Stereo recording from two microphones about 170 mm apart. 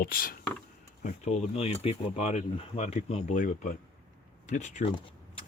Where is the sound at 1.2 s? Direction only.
35° left (ahead or behind).